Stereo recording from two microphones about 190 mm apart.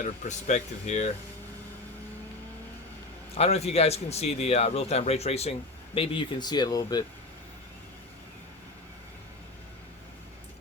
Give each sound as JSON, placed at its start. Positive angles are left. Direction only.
{"t": 0.0, "sound": "speech", "side_deg": 40}
{"t": 3.3, "sound": "speech", "side_deg": 35}